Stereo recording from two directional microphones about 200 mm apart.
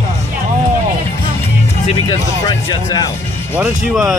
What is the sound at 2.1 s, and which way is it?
Speech, 20° left (ahead or behind).